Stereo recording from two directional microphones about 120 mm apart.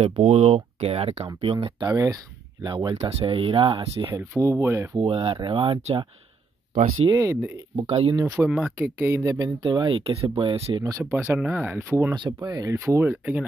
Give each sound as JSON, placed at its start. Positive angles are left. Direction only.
{"t": 0.0, "sound": "speech", "side_deg": -60}
{"t": 1.9, "sound": "speech", "side_deg": -30}
{"t": 3.1, "sound": "speech", "side_deg": -50}
{"t": 4.4, "sound": "speech", "side_deg": -20}
{"t": 4.9, "sound": "speech", "side_deg": -45}
{"t": 7.1, "sound": "speech", "side_deg": -25}
{"t": 7.7, "sound": "speech", "side_deg": -55}
{"t": 8.1, "sound": "speech", "side_deg": -35}
{"t": 8.5, "sound": "speech", "side_deg": -5}
{"t": 8.8, "sound": "speech", "side_deg": -20}
{"t": 10.8, "sound": "speech", "side_deg": -25}
{"t": 11.3, "sound": "speech", "side_deg": -15}
{"t": 12.4, "sound": "speech", "side_deg": -30}
{"t": 12.8, "sound": "speech", "side_deg": -20}